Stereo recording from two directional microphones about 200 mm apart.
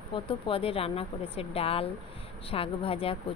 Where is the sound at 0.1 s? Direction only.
25° left (ahead or behind).